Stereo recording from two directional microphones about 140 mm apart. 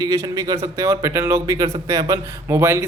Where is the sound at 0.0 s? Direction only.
25° right (ahead or behind).